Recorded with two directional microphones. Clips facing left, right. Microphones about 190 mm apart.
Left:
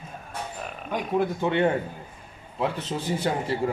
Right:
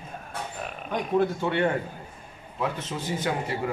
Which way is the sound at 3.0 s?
30° left (ahead or behind).